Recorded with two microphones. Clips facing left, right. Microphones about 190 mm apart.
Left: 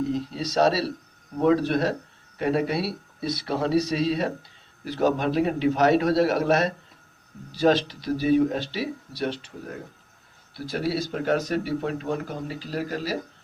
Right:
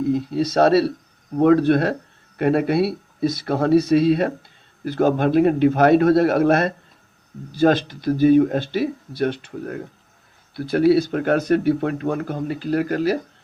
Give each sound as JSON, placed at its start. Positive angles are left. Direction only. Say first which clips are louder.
{"t": 0.1, "sound": "speech", "louder": "right 7 dB", "side_deg": -55}